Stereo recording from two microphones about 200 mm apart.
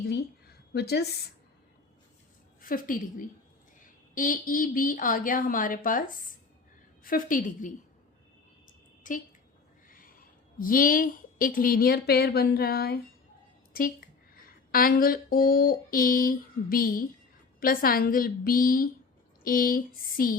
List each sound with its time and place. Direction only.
0.7 s a woman's voice: 55° left (ahead or behind)
2.6 s a woman's voice: 45° left (ahead or behind)
8.6 s a sound: 40° left (ahead or behind)
9.9 s a woman's voice: 45° left (ahead or behind)
14.3 s a sound: 45° left (ahead or behind)
17.6 s a woman's voice: 45° left (ahead or behind)